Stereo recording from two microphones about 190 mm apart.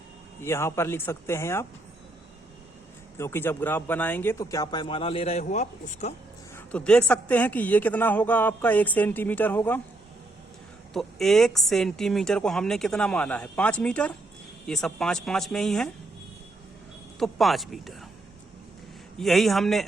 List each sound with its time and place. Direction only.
0.4 s speech: 15° left (ahead or behind)
3.2 s speech: 15° left (ahead or behind); by 6.1 s 35° left (ahead or behind)
6.7 s speech: 5° left (ahead or behind)
10.9 s a woman's voice: centre (ahead or behind)
17.2 s a woman's voice: centre (ahead or behind)
19.2 s a woman's voice: centre (ahead or behind)